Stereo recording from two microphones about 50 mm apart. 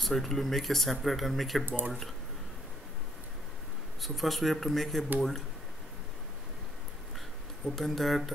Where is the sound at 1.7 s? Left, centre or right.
Right.